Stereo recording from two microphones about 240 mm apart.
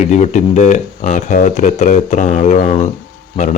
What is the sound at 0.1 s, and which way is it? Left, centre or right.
Speech, left.